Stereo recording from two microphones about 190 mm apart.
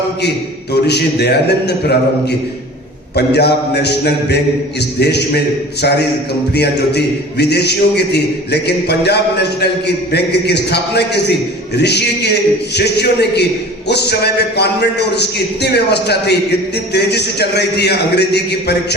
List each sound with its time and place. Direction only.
0.7 s a man's voice: 60° left (ahead or behind)
3.2 s a man's voice: 60° left (ahead or behind)
6.5 s a man's voice: 60° left (ahead or behind)